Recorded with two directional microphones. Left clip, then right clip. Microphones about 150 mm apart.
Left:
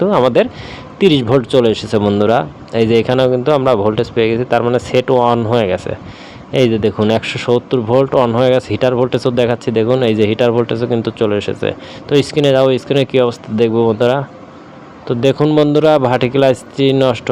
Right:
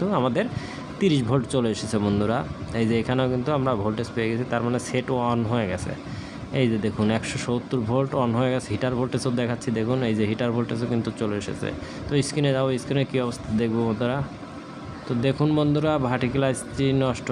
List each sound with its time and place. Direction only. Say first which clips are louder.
0.0 s speech: left 13 dB; 20° left (ahead or behind)
15.4 s speech: left 12 dB; 15° left (ahead or behind)